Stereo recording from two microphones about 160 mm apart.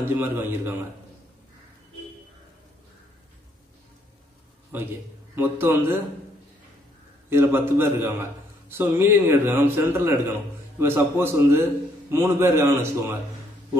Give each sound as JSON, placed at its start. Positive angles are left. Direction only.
{"t": 0.0, "sound": "a man's voice", "side_deg": -15}
{"t": 4.7, "sound": "a man's voice", "side_deg": -15}
{"t": 7.2, "sound": "a man's voice", "side_deg": -15}